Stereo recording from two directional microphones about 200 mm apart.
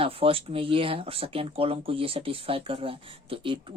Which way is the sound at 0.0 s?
30° right (ahead or behind).